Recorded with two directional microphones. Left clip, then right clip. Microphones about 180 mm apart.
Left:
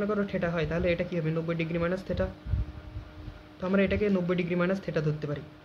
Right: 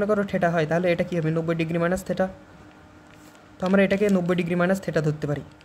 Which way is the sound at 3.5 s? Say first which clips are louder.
Right 6 dB; 40° right (ahead or behind).